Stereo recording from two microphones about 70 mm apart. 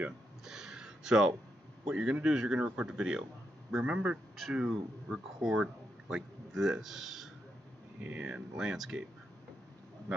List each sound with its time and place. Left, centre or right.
0.5 s a sound: centre
1.9 s a man's voice: centre
4.4 s speech: centre
8.0 s speech: centre
8.5 s a man's voice: centre